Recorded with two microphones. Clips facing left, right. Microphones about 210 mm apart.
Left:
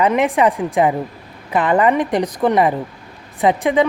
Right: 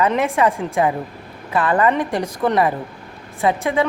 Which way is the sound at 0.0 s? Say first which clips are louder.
Left 2 dB; 15° left (ahead or behind).